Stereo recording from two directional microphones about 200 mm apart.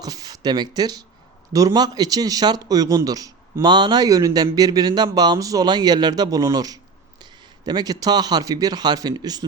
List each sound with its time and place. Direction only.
0.0 s speech: 20° right (ahead or behind)